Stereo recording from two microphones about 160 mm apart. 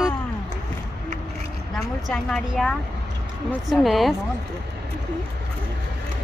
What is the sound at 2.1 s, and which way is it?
Speech, centre (ahead or behind).